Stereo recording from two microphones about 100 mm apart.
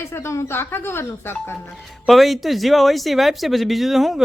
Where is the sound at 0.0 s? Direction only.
25° left (ahead or behind).